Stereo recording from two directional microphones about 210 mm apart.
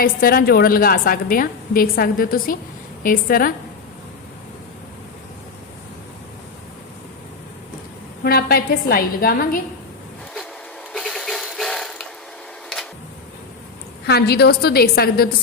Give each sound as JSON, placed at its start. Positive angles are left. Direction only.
{"t": 0.0, "sound": "a woman's voice", "side_deg": 45}
{"t": 8.2, "sound": "a woman's voice", "side_deg": 45}
{"t": 10.9, "sound": "mechanisms", "side_deg": 0}
{"t": 14.1, "sound": "a woman's voice", "side_deg": 50}